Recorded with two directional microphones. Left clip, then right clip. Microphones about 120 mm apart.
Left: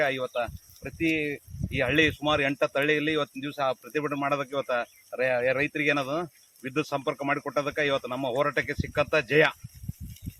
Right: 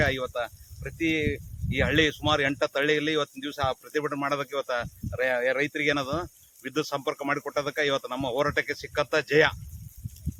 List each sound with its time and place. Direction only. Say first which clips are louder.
0.0 s speech: even; 25° right (ahead or behind)